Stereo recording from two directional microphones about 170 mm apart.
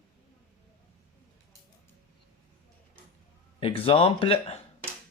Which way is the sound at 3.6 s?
35° left (ahead or behind).